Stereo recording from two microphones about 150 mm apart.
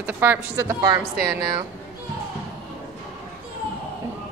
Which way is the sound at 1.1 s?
90° right.